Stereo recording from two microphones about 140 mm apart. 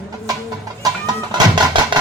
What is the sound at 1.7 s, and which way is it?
Music, 35° right (ahead or behind).